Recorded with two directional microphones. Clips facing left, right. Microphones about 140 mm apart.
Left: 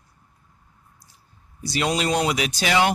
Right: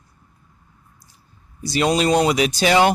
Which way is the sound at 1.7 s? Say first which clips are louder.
Right 5 dB; 35° right (ahead or behind).